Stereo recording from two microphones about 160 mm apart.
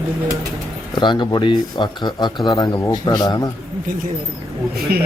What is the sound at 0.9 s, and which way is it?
Speech, 30° left (ahead or behind).